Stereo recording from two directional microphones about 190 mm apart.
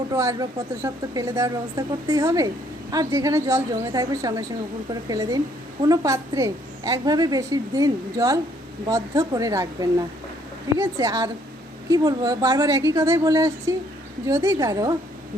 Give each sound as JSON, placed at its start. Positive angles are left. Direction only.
{"t": 0.1, "sound": "a woman's voice", "side_deg": -15}